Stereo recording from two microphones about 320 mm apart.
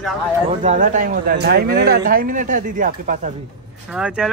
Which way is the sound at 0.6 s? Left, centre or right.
Right.